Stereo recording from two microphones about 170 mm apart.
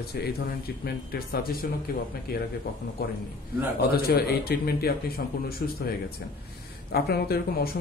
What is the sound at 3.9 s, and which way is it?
A man's voice, 65° left (ahead or behind).